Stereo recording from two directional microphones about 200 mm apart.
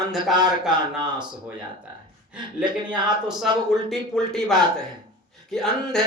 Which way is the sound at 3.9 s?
Centre (ahead or behind).